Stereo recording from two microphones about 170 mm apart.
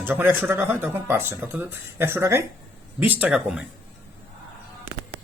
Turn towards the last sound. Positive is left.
turn(degrees=-5)  # may be behind; listen again after turning